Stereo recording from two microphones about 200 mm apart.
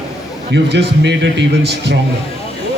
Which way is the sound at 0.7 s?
60° right (ahead or behind).